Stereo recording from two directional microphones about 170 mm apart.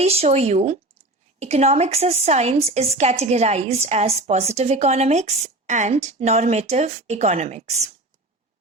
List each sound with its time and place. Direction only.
0.0 s a woman's voice: 35° right (ahead or behind)